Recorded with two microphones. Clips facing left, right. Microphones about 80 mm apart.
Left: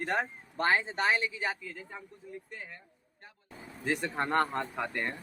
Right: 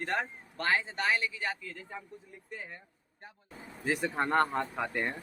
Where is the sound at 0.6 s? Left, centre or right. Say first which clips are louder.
Left 2 dB; left.